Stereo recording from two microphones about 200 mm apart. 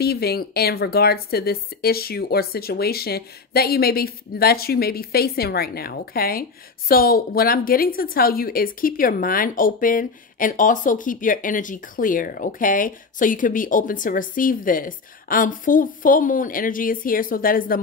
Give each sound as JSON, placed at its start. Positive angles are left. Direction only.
{"t": 0.0, "sound": "a woman's voice", "side_deg": 50}